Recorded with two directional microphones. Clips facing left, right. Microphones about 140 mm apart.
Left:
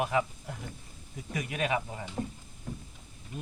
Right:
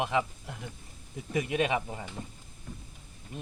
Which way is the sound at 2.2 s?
40° left (ahead or behind).